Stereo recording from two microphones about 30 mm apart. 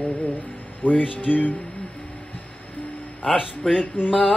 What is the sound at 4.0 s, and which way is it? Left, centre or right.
Speech, left.